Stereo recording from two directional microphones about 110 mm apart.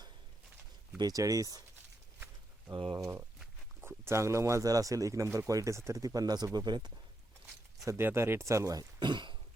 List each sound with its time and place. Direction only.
0.9 s speech: 35° right (ahead or behind)
2.7 s speech: 50° right (ahead or behind)
3.0 s speech: 25° right (ahead or behind); by 6.9 s 40° right (ahead or behind)
7.9 s speech: 20° right (ahead or behind); by 9.4 s 45° right (ahead or behind)